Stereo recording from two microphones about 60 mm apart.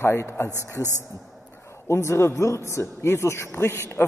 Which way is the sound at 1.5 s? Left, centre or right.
Left.